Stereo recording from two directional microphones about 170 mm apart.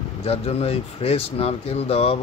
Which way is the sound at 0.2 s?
35° left (ahead or behind).